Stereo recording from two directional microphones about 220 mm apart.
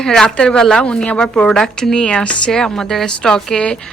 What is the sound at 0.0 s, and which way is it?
A woman's voice, centre (ahead or behind).